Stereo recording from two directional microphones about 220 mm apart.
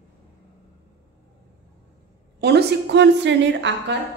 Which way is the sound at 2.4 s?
50° right (ahead or behind).